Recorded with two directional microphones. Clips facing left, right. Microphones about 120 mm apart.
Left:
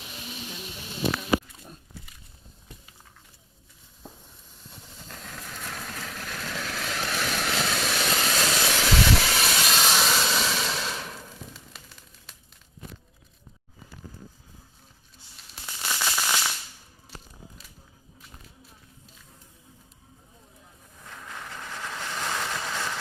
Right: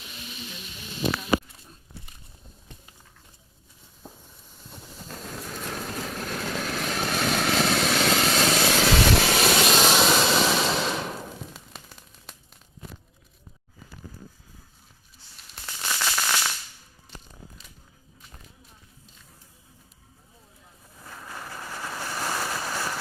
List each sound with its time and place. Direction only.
0.0 s a sound: 15° left (ahead or behind)
5.0 s vehicle: 10° right (ahead or behind)
5.8 s vehicle: 30° right (ahead or behind)
6.7 s vehicle: 30° right (ahead or behind)
6.9 s vehicle: 50° right (ahead or behind)
9.5 s vehicle: 65° right (ahead or behind)
9.7 s vehicle: 20° right (ahead or behind)
10.3 s vehicle: 60° right (ahead or behind)
10.8 s a sound: 65° right (ahead or behind)
15.6 s firecracker: centre (ahead or behind)
17.1 s a sound: 5° left (ahead or behind)
21.0 s waves: 10° right (ahead or behind)